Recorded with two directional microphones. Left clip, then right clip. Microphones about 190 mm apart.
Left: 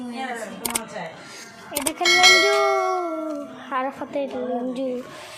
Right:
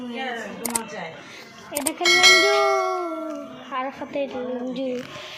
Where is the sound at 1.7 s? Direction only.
Centre (ahead or behind).